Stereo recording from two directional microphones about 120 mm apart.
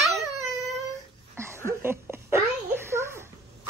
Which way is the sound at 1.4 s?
25° right (ahead or behind).